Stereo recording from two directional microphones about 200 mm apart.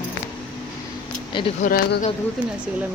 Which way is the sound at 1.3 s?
25° left (ahead or behind).